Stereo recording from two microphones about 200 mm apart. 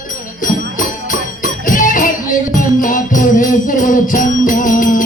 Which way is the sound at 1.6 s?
40° left (ahead or behind).